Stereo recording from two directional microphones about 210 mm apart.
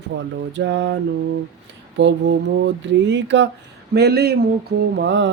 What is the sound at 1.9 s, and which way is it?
Speech, 55° right (ahead or behind).